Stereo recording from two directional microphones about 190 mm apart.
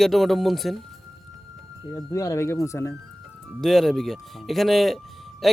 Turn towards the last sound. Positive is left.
turn(degrees=0)  # may be behind; listen again after turning